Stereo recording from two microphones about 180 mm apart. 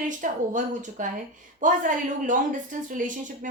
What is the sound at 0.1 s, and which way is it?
Speech, 45° right (ahead or behind).